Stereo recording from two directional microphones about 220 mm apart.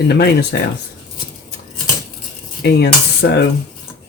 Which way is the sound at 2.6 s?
45° left (ahead or behind).